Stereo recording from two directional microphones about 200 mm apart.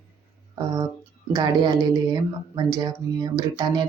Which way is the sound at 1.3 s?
20° right (ahead or behind).